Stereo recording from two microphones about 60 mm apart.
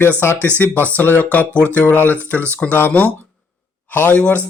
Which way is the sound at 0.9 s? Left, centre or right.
Left.